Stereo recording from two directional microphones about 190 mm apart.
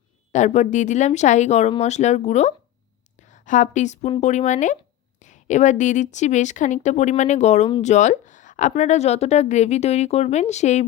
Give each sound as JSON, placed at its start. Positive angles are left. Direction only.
{"t": 0.3, "sound": "a woman's voice", "side_deg": 40}